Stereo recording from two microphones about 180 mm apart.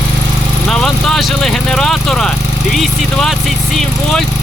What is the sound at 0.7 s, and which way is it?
Speech, centre (ahead or behind).